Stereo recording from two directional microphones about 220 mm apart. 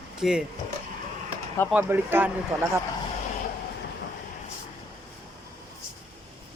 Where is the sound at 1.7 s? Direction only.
10° right (ahead or behind).